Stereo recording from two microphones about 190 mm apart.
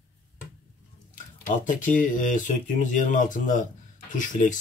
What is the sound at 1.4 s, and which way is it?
Speech, 45° left (ahead or behind).